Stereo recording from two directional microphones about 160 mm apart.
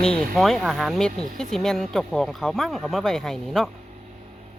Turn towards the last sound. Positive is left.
turn(degrees=0)  # may be behind; listen again after turning